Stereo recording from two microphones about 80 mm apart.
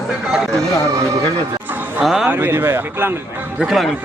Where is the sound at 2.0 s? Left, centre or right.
Centre.